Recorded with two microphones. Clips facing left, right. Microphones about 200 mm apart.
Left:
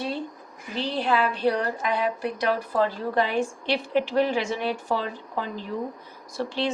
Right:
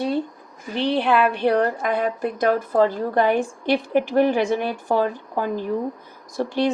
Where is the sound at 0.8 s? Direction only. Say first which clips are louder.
Right 5 dB; 65° right (ahead or behind).